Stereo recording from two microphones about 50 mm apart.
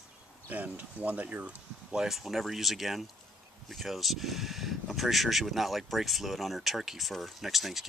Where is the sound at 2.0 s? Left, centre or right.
Centre.